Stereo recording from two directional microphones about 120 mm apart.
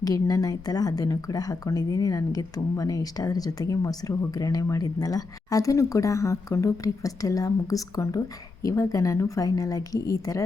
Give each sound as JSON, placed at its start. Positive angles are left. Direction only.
{"t": 0.0, "sound": "a woman's voice", "side_deg": 30}